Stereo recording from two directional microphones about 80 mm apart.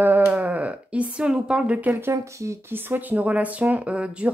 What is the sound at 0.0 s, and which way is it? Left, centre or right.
Bleat, right.